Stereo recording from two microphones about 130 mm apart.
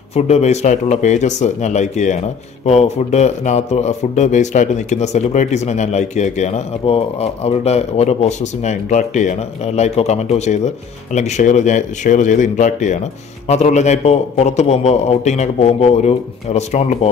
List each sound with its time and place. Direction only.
0.1 s speech: 60° left (ahead or behind)